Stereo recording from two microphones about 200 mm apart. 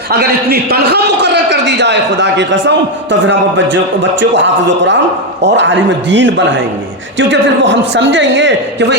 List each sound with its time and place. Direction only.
0.1 s a man's voice: 50° right (ahead or behind)